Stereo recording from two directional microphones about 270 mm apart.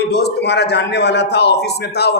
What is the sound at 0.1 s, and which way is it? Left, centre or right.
A man's voice, left.